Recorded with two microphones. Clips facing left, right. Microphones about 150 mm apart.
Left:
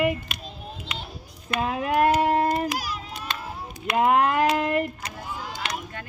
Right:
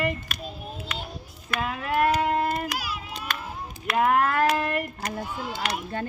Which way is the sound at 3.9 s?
20° left (ahead or behind).